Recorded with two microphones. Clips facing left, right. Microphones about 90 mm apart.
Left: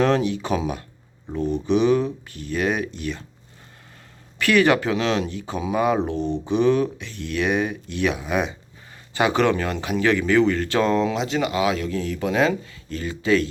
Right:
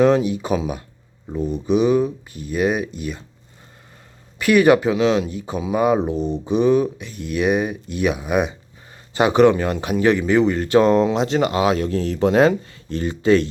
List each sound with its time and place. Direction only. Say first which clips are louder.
0.0 s speech: right 4 dB; 5° right (ahead or behind)
4.4 s speech: right 4 dB; 10° right (ahead or behind); by 13.5 s 35° right (ahead or behind)